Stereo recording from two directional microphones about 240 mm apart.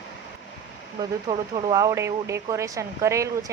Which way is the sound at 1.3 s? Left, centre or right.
Centre.